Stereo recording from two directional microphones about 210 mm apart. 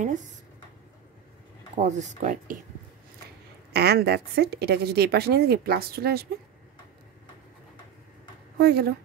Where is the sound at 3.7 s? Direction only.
50° right (ahead or behind).